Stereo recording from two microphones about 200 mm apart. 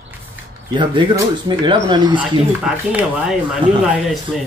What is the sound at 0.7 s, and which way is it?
Speech, 25° right (ahead or behind).